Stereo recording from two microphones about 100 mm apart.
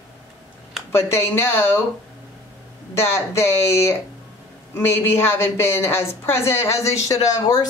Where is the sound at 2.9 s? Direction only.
25° left (ahead or behind).